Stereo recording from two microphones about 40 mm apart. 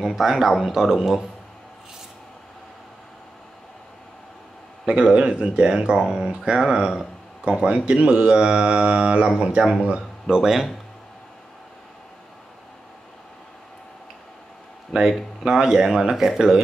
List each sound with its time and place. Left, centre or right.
0.0 s speech: centre
4.8 s speech: right
7.6 s speech: right
10.2 s speech: centre
14.9 s speech: centre